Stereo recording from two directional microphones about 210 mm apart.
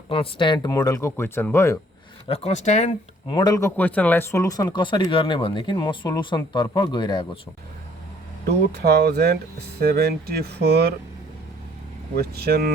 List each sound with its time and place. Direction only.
0.1 s speech: 25° left (ahead or behind)
2.2 s speech: 30° left (ahead or behind)
3.2 s speech: 20° left (ahead or behind)
8.4 s speech: 50° right (ahead or behind)
12.1 s speech: 45° right (ahead or behind)